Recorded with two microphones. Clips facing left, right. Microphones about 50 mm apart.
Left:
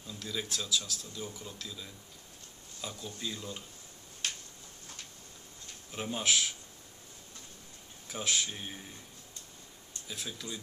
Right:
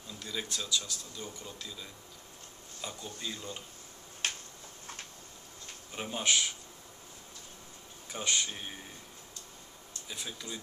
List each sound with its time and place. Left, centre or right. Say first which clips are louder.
0.0 s speech: left 1 dB; centre
4.2 s a sound: right 3 dB; right
5.9 s speech: even; centre
8.1 s speech: even; centre
10.0 s speech: left 1 dB; centre